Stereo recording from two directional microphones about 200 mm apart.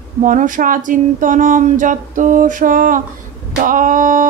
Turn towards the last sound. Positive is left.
turn(degrees=-40)  # may be behind; listen again after turning